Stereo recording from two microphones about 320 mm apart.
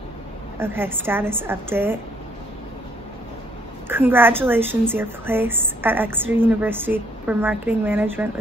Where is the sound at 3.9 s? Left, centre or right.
Centre.